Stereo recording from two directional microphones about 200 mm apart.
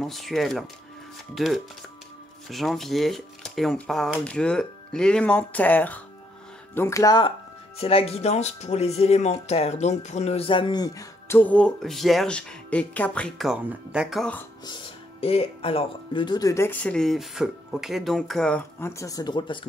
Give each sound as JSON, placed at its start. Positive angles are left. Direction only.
{"t": 0.0, "sound": "speech", "side_deg": 0}
{"t": 7.8, "sound": "speech", "side_deg": 30}
{"t": 14.7, "sound": "speech", "side_deg": 30}